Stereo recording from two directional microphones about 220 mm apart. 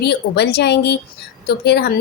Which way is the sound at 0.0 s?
50° left (ahead or behind).